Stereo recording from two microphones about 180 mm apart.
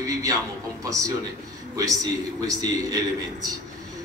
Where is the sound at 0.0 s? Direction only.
20° right (ahead or behind).